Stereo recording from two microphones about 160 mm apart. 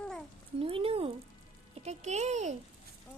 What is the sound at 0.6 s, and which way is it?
A child's voice, 35° right (ahead or behind).